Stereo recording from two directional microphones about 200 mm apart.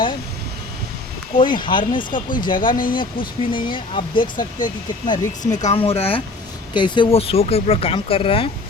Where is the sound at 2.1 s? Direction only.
40° left (ahead or behind).